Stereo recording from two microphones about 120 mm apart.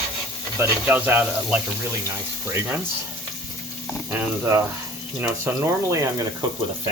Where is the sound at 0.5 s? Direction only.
20° right (ahead or behind).